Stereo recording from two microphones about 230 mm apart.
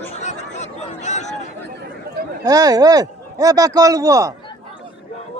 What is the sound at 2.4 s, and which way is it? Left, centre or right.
Speech, centre.